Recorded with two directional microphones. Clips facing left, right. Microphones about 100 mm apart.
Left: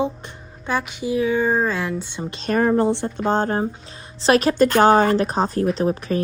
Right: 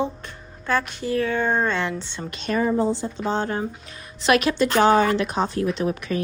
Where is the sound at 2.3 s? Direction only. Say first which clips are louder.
Left 2 dB; 35° left (ahead or behind).